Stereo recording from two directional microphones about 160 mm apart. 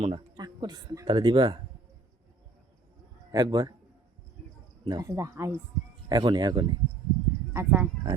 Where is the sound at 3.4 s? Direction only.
25° right (ahead or behind).